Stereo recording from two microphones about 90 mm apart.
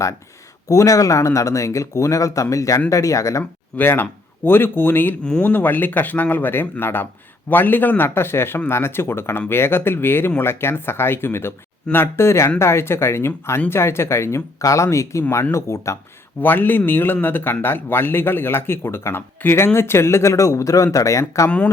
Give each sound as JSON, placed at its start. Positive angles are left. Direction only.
{"t": 0.7, "sound": "speech", "side_deg": 35}
{"t": 3.8, "sound": "a man's voice", "side_deg": 20}
{"t": 5.2, "sound": "a man's voice", "side_deg": 15}
{"t": 16.4, "sound": "a man's voice", "side_deg": 20}